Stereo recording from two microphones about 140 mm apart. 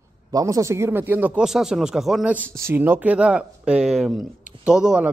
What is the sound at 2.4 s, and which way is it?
Speech, 15° right (ahead or behind).